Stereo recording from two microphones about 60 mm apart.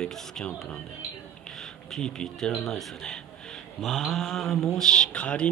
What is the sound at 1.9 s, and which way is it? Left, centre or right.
Speech, centre.